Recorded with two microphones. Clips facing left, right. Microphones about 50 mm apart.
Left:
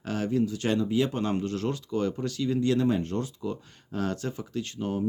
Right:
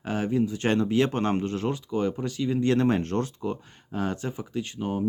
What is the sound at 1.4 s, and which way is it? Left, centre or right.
Speech, right.